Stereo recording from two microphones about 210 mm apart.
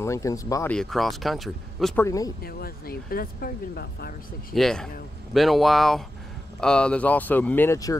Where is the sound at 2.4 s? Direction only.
45° left (ahead or behind).